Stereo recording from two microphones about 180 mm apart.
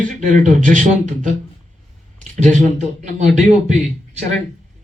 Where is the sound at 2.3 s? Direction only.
45° right (ahead or behind).